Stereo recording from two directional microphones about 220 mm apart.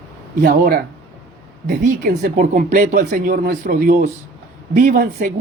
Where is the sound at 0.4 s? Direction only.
45° right (ahead or behind).